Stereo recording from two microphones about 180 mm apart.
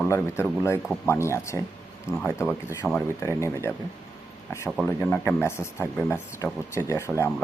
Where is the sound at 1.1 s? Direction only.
15° left (ahead or behind).